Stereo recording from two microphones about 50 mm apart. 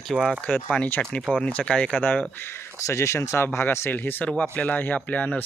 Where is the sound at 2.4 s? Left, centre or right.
Left.